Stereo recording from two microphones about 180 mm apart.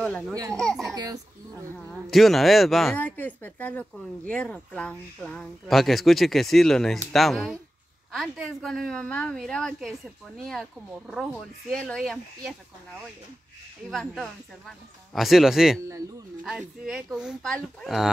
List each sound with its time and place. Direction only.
0.0 s speech: 5° left (ahead or behind)
0.9 s a child's voice: 20° right (ahead or behind)
1.8 s speech: 5° left (ahead or behind)
13.8 s speech: centre (ahead or behind)